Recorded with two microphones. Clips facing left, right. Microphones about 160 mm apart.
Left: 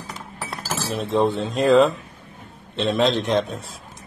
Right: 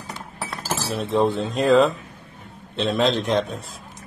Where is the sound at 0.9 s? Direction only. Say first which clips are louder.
Even; centre (ahead or behind).